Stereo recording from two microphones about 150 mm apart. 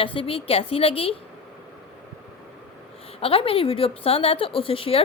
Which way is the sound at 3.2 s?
40° left (ahead or behind).